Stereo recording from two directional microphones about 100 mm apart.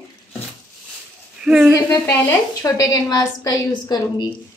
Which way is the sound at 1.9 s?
25° left (ahead or behind).